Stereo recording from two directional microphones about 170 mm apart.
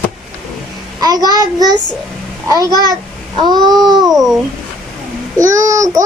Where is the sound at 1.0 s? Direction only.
25° right (ahead or behind).